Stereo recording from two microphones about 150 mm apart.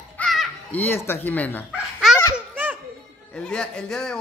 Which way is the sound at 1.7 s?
Centre (ahead or behind).